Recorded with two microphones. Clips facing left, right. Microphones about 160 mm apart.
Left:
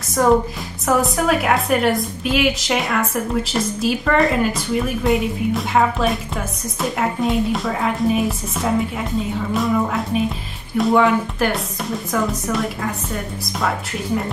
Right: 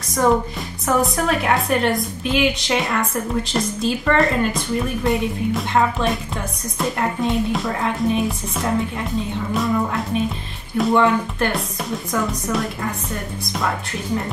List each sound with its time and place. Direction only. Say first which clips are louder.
0.1 s a woman's voice: left 2 dB; 5° left (ahead or behind)